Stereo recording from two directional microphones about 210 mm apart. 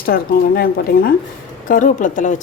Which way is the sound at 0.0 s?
45° left (ahead or behind).